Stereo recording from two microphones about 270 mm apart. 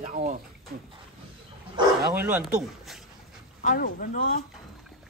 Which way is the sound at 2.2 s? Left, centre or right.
Centre.